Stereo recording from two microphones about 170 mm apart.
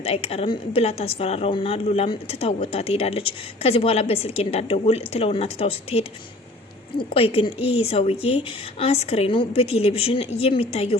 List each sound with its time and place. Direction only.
0.0 s a woman's voice: 35° left (ahead or behind)
7.1 s a woman's voice: 35° left (ahead or behind)